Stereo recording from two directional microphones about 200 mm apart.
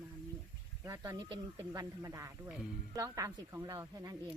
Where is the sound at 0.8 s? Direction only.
15° right (ahead or behind).